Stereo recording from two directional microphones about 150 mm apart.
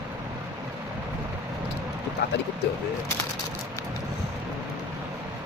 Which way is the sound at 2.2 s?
90° left.